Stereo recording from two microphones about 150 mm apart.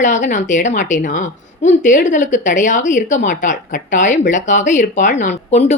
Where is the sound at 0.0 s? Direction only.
55° left (ahead or behind).